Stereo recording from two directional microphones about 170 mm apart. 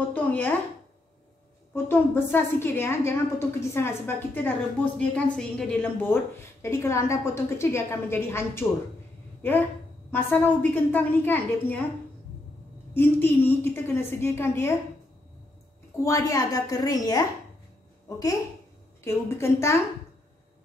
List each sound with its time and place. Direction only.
0.1 s a sound: 10° left (ahead or behind)
1.7 s a woman's voice: 15° left (ahead or behind)
10.1 s a woman's voice: 10° left (ahead or behind)
12.9 s a woman's voice: 10° left (ahead or behind)
16.0 s a woman's voice: 20° left (ahead or behind)
19.0 s a woman's voice: 15° left (ahead or behind)